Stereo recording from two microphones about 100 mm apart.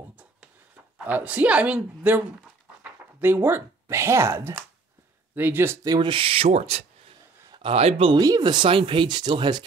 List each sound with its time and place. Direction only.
0.1 s a sound: 15° right (ahead or behind)
1.0 s a woman's voice: 15° right (ahead or behind)
5.9 s speech: 50° right (ahead or behind); by 6.8 s 90° right
7.5 s speech: 75° right (ahead or behind)
8.2 s speech: 40° right (ahead or behind)
8.6 s speech: 60° right (ahead or behind)